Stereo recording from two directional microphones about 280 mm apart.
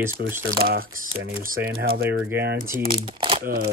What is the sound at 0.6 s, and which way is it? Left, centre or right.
Speech, right.